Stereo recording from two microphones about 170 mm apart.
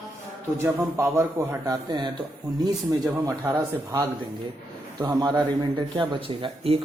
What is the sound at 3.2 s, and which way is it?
Speech, 15° right (ahead or behind).